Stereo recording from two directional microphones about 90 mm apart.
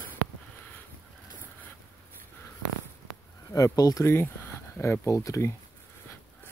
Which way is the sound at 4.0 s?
25° left (ahead or behind).